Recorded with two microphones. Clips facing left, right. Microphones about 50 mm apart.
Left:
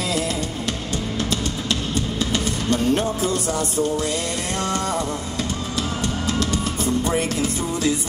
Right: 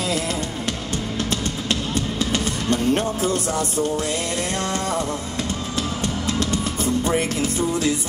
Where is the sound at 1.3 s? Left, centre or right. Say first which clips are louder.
Even; right.